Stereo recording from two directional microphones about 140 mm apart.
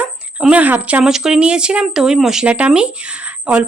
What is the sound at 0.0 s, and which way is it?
A woman's voice, 10° right (ahead or behind).